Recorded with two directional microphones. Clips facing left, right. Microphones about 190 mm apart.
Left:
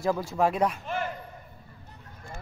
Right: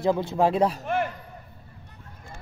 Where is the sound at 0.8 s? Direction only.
55° right (ahead or behind).